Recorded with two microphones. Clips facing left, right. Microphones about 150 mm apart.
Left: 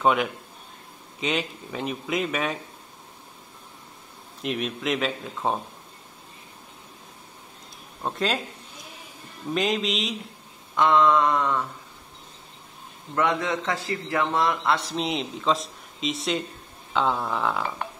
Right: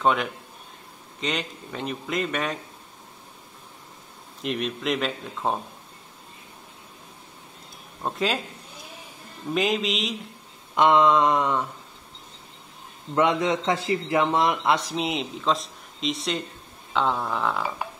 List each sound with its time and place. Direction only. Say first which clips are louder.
0.0 s speech: left 1 dB; 5° left (ahead or behind)
4.4 s speech: even; centre (ahead or behind)
8.0 s speech: even; centre (ahead or behind)
9.5 s speech: right 1 dB; centre (ahead or behind)
10.7 s a man's voice: right 1 dB; 20° right (ahead or behind)
13.1 s a man's voice: right 3 dB; 20° right (ahead or behind)
15.0 s speech: even; centre (ahead or behind)